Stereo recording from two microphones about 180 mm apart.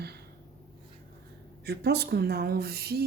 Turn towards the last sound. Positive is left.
turn(degrees=-60)  # may be behind; listen again after turning